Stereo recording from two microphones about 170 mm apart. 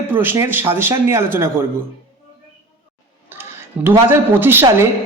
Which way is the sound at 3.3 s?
15° right (ahead or behind).